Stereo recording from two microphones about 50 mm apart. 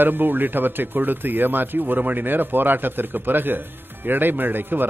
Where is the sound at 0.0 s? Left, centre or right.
Right.